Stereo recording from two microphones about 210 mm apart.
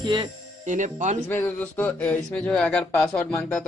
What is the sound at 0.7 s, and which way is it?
Speech, 35° right (ahead or behind).